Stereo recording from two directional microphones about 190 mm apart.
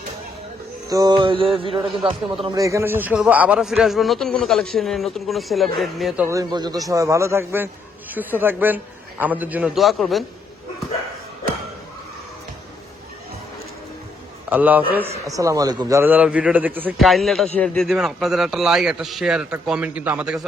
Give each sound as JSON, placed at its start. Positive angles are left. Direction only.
{"t": 0.9, "sound": "music", "side_deg": -20}
{"t": 2.4, "sound": "a man's voice", "side_deg": -20}
{"t": 6.2, "sound": "a man's voice", "side_deg": -20}
{"t": 14.5, "sound": "a man's voice", "side_deg": -10}